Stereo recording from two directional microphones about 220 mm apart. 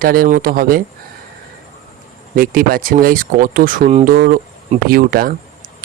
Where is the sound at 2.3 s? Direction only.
40° right (ahead or behind).